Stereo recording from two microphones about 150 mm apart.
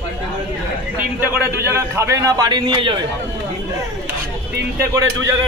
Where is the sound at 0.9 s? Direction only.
15° right (ahead or behind); by 3.0 s 30° right (ahead or behind).